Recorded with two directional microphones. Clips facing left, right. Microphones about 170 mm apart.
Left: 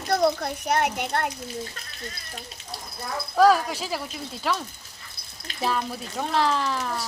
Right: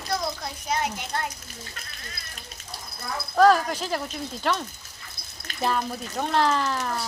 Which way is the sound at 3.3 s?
5° left (ahead or behind).